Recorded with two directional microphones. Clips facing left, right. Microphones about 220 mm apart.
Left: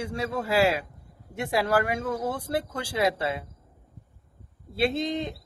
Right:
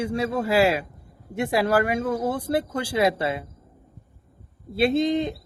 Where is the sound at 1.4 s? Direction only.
10° right (ahead or behind).